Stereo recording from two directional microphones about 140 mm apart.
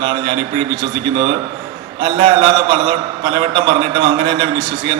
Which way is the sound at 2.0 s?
35° right (ahead or behind).